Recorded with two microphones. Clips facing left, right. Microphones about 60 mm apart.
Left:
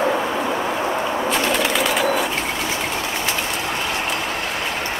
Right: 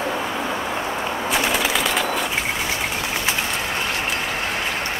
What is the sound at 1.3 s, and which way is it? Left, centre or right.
Bird, centre.